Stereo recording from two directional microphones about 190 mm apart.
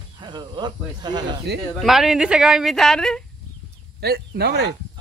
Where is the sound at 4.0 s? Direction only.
55° right (ahead or behind).